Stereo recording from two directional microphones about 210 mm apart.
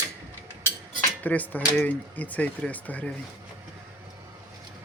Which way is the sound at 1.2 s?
10° left (ahead or behind).